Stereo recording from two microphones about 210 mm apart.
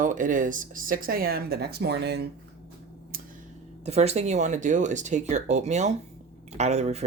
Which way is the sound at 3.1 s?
45° right (ahead or behind).